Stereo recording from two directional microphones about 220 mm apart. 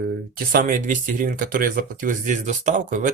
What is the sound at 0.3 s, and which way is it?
Speech, 40° right (ahead or behind).